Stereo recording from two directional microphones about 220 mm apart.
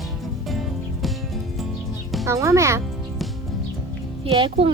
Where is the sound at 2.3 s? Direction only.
15° right (ahead or behind).